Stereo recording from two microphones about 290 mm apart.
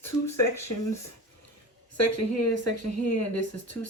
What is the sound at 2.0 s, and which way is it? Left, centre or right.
Speech, left.